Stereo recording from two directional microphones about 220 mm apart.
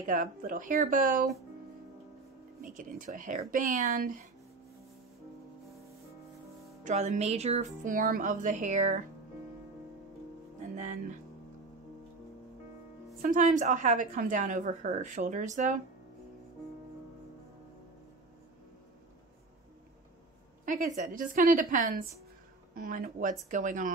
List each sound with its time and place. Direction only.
0.0 s a woman's voice: 40° right (ahead or behind)
2.6 s a woman's voice: 35° right (ahead or behind)
6.8 s a woman's voice: 30° right (ahead or behind)
13.2 s a woman's voice: 35° right (ahead or behind)
20.6 s a woman's voice: 35° right (ahead or behind)